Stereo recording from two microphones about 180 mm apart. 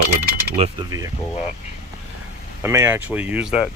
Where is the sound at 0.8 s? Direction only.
20° right (ahead or behind).